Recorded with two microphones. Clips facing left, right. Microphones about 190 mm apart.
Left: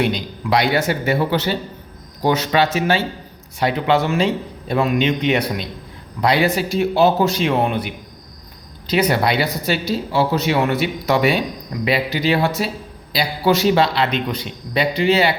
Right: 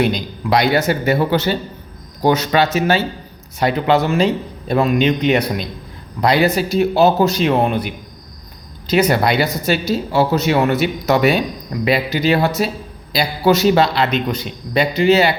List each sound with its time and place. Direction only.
0.0 s a man's voice: 40° right (ahead or behind)
8.9 s speech: 45° right (ahead or behind)